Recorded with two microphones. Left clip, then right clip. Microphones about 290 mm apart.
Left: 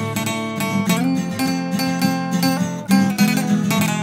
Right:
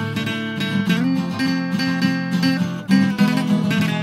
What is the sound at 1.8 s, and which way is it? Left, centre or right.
Music, left.